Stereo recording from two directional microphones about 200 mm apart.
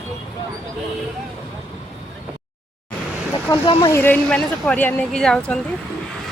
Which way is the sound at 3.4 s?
25° left (ahead or behind).